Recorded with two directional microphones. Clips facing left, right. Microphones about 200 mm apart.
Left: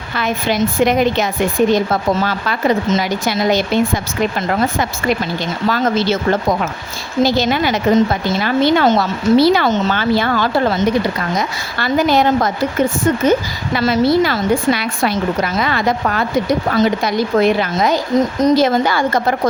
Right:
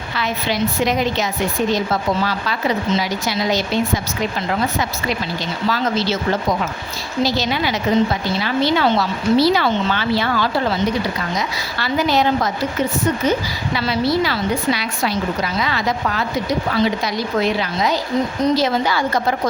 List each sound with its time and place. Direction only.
0.2 s a woman's voice: 50° left (ahead or behind)
7.2 s a woman's voice: 50° left (ahead or behind)